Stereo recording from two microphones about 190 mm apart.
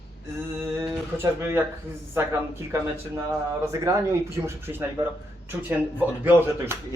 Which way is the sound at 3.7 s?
15° right (ahead or behind).